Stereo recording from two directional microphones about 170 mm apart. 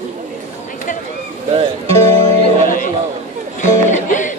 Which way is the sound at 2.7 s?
50° left (ahead or behind).